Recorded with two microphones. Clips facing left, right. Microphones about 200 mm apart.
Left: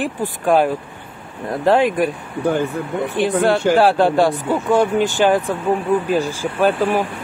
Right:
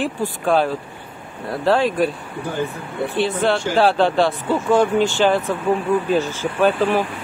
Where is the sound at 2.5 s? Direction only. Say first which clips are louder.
Left 6 dB; 60° left (ahead or behind).